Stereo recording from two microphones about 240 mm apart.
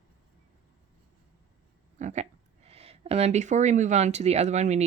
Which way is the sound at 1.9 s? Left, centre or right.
Right.